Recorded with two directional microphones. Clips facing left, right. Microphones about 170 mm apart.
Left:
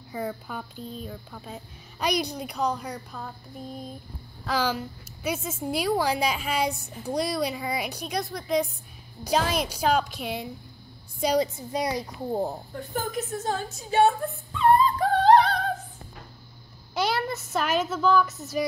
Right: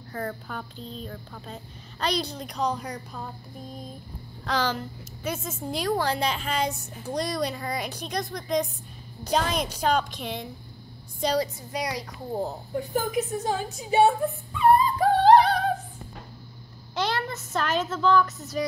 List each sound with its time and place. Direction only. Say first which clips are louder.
0.1 s a woman's voice: left 1 dB; 10° left (ahead or behind)
4.5 s a woman's voice: even; 10° left (ahead or behind)
11.3 s speech: left 2 dB; 25° left (ahead or behind)
12.3 s a woman's voice: left 2 dB; 15° left (ahead or behind)
12.7 s a woman's voice: right 9 dB; 10° right (ahead or behind)
14.6 s yodeling: right 1 dB; 5° right (ahead or behind)
16.9 s a woman's voice: left 2 dB; 10° left (ahead or behind)